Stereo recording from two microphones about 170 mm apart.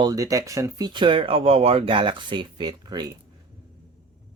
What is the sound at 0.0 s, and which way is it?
Speech, 20° right (ahead or behind).